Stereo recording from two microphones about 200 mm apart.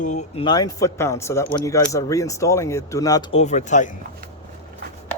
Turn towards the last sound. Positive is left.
turn(degrees=35)  # may be behind; listen again after turning